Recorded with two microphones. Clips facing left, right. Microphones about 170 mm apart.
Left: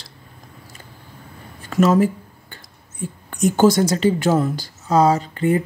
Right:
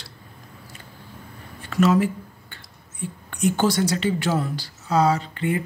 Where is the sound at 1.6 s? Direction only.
45° left (ahead or behind).